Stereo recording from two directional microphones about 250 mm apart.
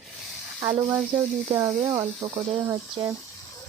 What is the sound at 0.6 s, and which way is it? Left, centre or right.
Speech, centre.